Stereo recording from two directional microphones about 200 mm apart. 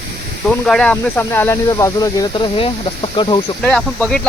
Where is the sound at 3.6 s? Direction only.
5° left (ahead or behind).